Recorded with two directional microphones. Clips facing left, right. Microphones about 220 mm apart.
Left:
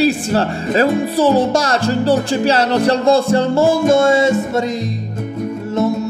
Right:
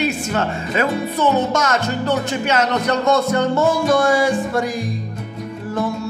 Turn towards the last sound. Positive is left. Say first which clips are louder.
# left 5 dB
turn(degrees=25)  # may be behind; listen again after turning